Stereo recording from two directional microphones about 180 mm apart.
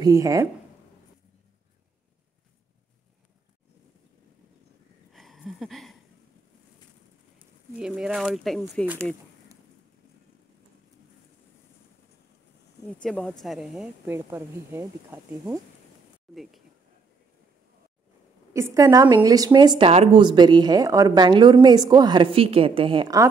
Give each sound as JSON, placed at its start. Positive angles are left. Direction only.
{"t": 0.0, "sound": "speech", "side_deg": -20}
{"t": 5.1, "sound": "a sound", "side_deg": 0}
{"t": 7.3, "sound": "speech", "side_deg": -5}
{"t": 13.0, "sound": "speech", "side_deg": 5}
{"t": 18.5, "sound": "speech", "side_deg": -15}